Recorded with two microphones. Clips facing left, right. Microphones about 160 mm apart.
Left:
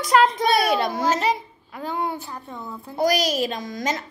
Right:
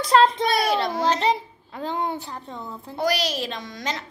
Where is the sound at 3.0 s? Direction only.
45° left (ahead or behind).